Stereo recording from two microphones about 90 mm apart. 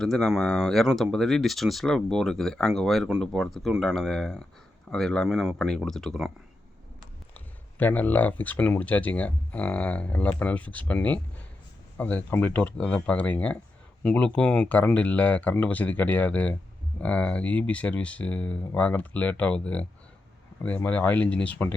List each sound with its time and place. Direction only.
0.0 s speech: 5° left (ahead or behind)
7.3 s speech: 20° left (ahead or behind)